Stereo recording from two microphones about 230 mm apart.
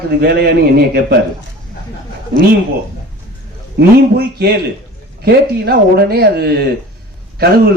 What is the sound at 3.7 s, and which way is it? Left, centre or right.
A man's voice, right.